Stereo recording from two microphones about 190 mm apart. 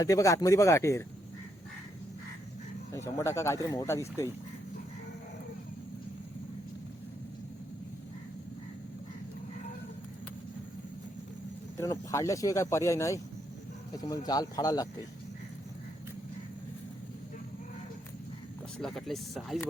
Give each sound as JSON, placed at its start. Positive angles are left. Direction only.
{"t": 0.0, "sound": "speech", "side_deg": 15}
{"t": 2.9, "sound": "speech", "side_deg": 15}
{"t": 11.8, "sound": "speech", "side_deg": 15}
{"t": 18.8, "sound": "speech", "side_deg": 0}